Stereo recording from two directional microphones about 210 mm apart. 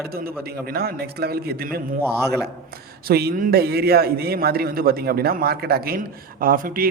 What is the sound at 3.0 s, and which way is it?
A man's voice, 45° right (ahead or behind).